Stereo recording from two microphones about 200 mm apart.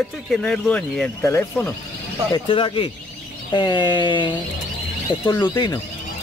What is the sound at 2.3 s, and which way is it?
Speech, 25° left (ahead or behind).